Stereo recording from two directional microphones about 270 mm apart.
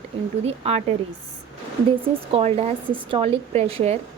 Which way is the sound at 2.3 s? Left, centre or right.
Right.